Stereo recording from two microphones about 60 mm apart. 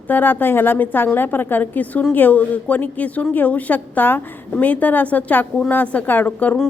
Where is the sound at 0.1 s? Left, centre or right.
Left.